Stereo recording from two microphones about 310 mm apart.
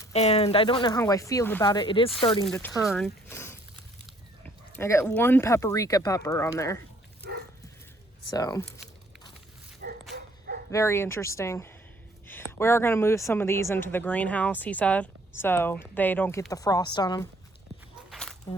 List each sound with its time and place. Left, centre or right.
0.0 s speech: centre
7.2 s dog: right
8.3 s speech: centre
9.8 s dog: right
10.7 s speech: centre
18.1 s a sound: centre